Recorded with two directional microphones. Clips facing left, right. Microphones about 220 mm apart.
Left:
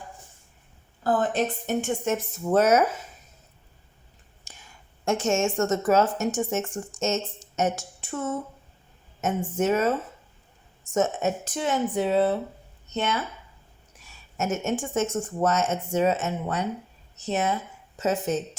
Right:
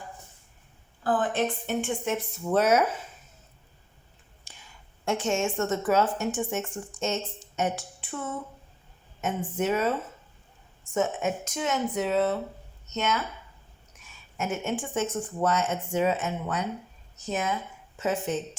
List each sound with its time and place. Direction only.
1.0 s a woman's voice: 40° left (ahead or behind)
4.5 s a sound: 45° left (ahead or behind)
5.0 s a woman's voice: 45° left (ahead or behind)
10.9 s speech: 35° left (ahead or behind)
14.3 s a woman's voice: 40° left (ahead or behind)